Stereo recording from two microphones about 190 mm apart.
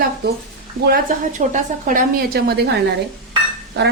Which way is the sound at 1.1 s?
45° right (ahead or behind).